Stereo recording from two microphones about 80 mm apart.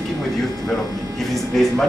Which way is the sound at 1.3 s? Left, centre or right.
Centre.